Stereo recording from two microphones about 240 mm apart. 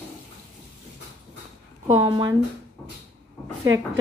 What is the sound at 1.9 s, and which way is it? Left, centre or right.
Speech, centre.